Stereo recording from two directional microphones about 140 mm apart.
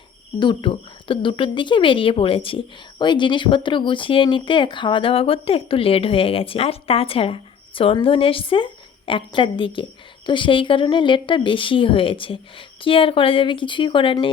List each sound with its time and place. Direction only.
0.3 s a woman's voice: 35° left (ahead or behind)